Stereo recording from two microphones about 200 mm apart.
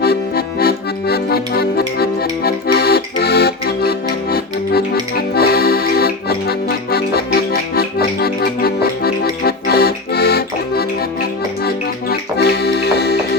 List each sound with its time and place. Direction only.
0.0 s music: 50° left (ahead or behind)